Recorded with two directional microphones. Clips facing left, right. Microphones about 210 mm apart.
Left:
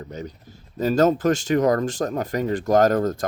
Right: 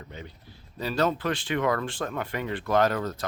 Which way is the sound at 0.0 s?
40° left (ahead or behind).